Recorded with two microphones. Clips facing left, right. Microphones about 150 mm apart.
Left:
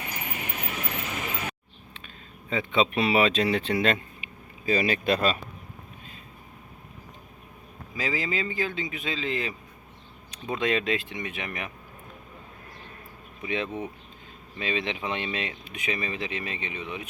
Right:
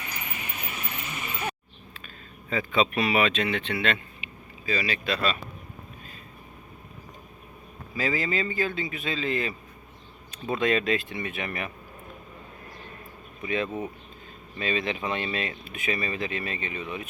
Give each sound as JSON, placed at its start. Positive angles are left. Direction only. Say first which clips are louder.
{"t": 0.1, "sound": "vehicle", "louder": "left 3 dB", "side_deg": 55}
{"t": 2.5, "sound": "speech", "louder": "even", "side_deg": 25}
{"t": 7.9, "sound": "speech", "louder": "right 2 dB", "side_deg": 15}
{"t": 13.4, "sound": "speech", "louder": "right 1 dB", "side_deg": 20}